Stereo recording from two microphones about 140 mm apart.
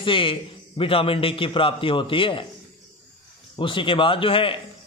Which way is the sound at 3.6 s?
35° left (ahead or behind).